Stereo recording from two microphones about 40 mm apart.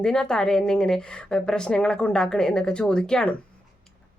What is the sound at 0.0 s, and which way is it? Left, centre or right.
A woman's voice, centre.